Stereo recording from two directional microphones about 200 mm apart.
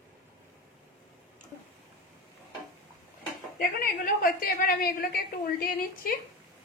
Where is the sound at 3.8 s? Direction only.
45° left (ahead or behind).